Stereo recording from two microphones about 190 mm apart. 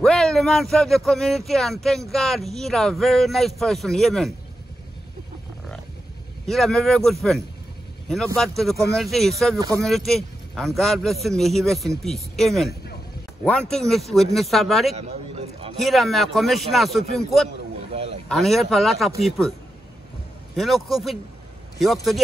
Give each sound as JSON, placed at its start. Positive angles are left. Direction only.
{"t": 0.0, "sound": "speech", "side_deg": 0}
{"t": 6.4, "sound": "speech", "side_deg": 0}
{"t": 9.6, "sound": "speech", "side_deg": -20}
{"t": 9.8, "sound": "speech", "side_deg": 0}
{"t": 15.0, "sound": "a sound", "side_deg": -35}
{"t": 15.8, "sound": "speech", "side_deg": 0}
{"t": 17.9, "sound": "a sound", "side_deg": -35}
{"t": 18.3, "sound": "speech", "side_deg": 0}
{"t": 20.5, "sound": "speech", "side_deg": 0}